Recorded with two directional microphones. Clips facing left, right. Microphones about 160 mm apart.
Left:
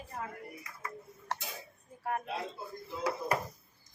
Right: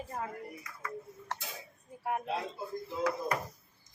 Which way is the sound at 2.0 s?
15° right (ahead or behind).